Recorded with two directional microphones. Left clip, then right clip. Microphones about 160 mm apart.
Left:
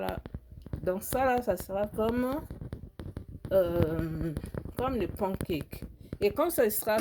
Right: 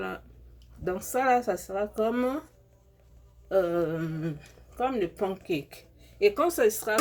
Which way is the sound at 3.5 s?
40° left (ahead or behind).